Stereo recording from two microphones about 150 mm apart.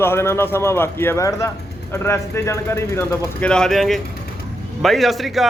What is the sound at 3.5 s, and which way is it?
A man's voice, 5° left (ahead or behind).